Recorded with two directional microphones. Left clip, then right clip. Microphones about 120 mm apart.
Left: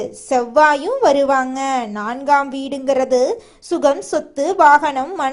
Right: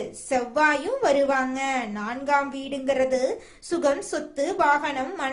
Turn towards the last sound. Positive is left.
turn(degrees=50)  # may be behind; listen again after turning